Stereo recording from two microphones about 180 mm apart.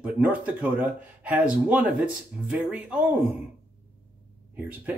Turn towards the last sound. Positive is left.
turn(degrees=-10)  # may be behind; listen again after turning